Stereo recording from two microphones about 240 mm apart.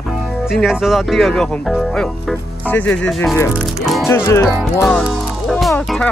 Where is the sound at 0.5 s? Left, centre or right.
Centre.